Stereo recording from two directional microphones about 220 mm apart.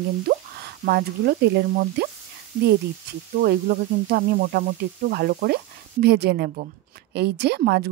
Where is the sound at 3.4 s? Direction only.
45° right (ahead or behind).